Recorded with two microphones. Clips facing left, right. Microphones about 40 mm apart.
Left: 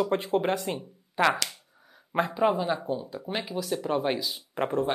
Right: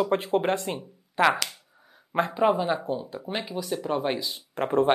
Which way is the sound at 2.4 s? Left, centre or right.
Centre.